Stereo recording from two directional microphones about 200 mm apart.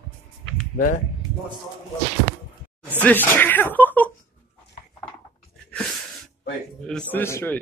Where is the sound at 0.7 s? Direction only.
40° left (ahead or behind).